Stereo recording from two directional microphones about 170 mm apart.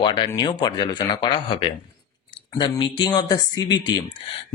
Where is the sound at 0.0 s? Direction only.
30° left (ahead or behind).